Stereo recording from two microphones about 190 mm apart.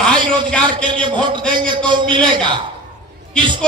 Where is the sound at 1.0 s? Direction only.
25° right (ahead or behind).